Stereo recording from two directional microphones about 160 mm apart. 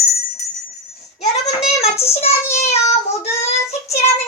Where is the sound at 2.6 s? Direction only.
40° left (ahead or behind).